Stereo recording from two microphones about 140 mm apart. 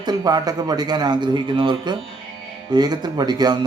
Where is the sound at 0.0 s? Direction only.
30° right (ahead or behind).